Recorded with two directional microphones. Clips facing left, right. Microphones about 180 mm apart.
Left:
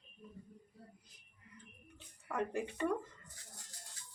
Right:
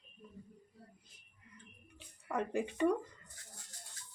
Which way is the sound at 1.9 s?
15° right (ahead or behind).